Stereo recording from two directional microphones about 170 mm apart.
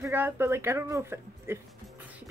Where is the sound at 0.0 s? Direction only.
15° right (ahead or behind).